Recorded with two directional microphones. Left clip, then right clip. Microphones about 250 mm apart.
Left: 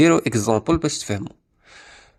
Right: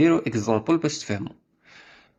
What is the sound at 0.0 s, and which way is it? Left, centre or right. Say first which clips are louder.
Speech: left 4 dB; left.